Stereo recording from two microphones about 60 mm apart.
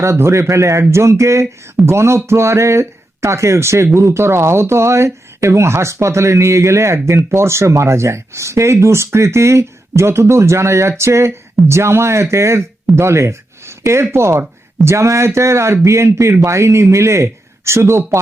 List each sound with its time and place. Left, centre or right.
0.0 s speech: right